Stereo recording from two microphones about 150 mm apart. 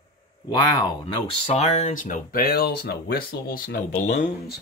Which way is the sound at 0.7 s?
35° left (ahead or behind).